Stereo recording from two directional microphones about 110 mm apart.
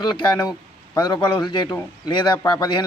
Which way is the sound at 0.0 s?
40° left (ahead or behind).